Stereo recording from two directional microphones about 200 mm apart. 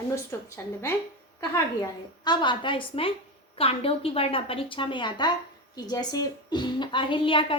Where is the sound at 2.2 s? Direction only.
20° left (ahead or behind).